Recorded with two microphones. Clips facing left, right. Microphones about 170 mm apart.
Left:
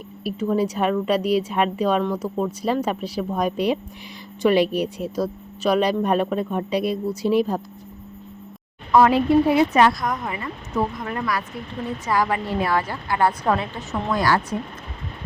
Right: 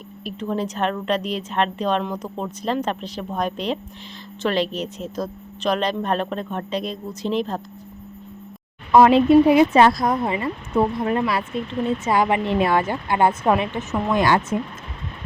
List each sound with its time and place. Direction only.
0.3 s a woman's voice: 10° left (ahead or behind)
8.9 s speech: 20° right (ahead or behind)
9.7 s speech: 30° right (ahead or behind)